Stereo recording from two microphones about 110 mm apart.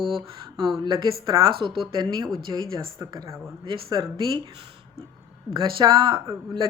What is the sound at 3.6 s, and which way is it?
Speech, 45° right (ahead or behind).